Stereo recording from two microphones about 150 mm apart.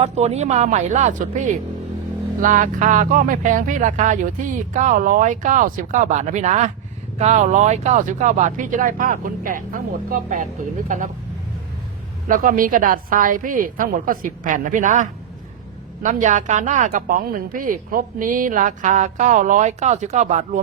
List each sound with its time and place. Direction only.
0.0 s speech: 45° right (ahead or behind)
12.3 s speech: 65° right (ahead or behind)
16.0 s speech: 55° right (ahead or behind)